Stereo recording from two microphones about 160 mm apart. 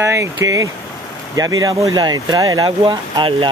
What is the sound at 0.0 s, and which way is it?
Speech, 20° right (ahead or behind).